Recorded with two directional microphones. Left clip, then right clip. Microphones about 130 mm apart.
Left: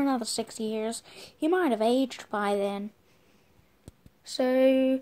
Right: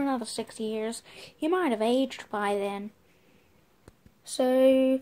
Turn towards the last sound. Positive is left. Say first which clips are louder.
# right 1 dB
turn(degrees=0)  # may be behind; listen again after turning